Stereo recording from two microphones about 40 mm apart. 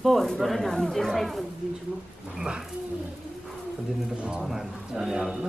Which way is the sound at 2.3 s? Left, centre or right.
Right.